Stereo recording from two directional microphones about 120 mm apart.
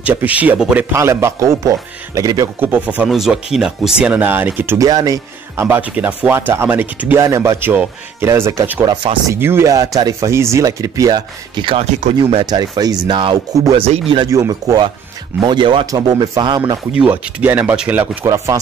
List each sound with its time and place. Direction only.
0.0 s speech: 15° right (ahead or behind)
0.9 s speech: 20° right (ahead or behind)
2.6 s speech: 15° right (ahead or behind)
3.1 s speech: centre (ahead or behind); by 4.7 s 15° right (ahead or behind)
4.7 s speech: 30° right (ahead or behind)
5.6 s speech: 15° right (ahead or behind); by 11.8 s 40° right (ahead or behind)
11.8 s speech: 70° right (ahead or behind)
12.4 s speech: 35° right (ahead or behind)
13.7 s speech: 60° right (ahead or behind)
14.3 s speech: 30° right (ahead or behind)
16.9 s speech: 10° right (ahead or behind)
18.2 s speech: 25° right (ahead or behind)